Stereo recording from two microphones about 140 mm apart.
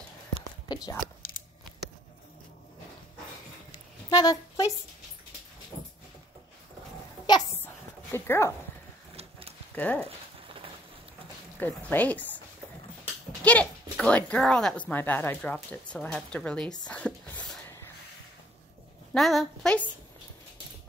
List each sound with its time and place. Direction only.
0.7 s speech: 30° left (ahead or behind)
4.1 s a woman's voice: 25° left (ahead or behind)
7.3 s speech: 30° left (ahead or behind)
7.6 s dog: 20° left (ahead or behind)
9.8 s speech: 10° left (ahead or behind)
11.6 s speech: 10° left (ahead or behind)
13.4 s speech: 10° left (ahead or behind)
16.8 s whispering: 10° left (ahead or behind)
19.1 s a woman's voice: centre (ahead or behind)